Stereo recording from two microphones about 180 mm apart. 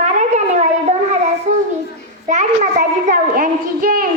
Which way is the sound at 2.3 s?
45° right (ahead or behind).